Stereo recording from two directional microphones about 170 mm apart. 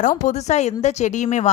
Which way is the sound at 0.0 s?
45° left (ahead or behind).